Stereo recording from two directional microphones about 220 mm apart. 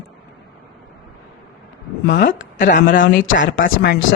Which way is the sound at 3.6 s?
50° left (ahead or behind).